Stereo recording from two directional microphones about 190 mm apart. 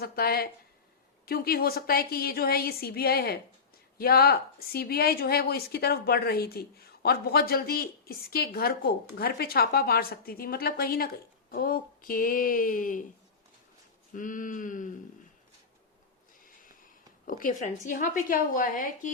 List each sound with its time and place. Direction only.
0.0 s speech: 55° left (ahead or behind)
14.1 s speech: 45° left (ahead or behind)
17.2 s speech: 45° left (ahead or behind)